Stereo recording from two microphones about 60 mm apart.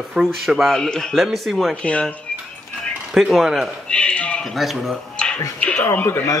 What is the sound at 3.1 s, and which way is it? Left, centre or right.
Speech, centre.